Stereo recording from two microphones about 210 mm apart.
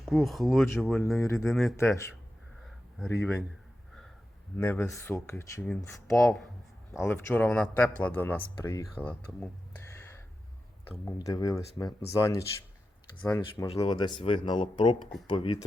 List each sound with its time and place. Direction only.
0.0 s speech: centre (ahead or behind)
2.6 s a sound: 5° left (ahead or behind)
4.5 s speech: 10° left (ahead or behind)
8.6 s a sound: 15° left (ahead or behind)
11.0 s speech: 15° left (ahead or behind)
13.7 s speech: 25° left (ahead or behind)